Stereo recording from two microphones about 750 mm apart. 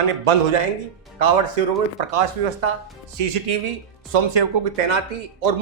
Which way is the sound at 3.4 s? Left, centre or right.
Right.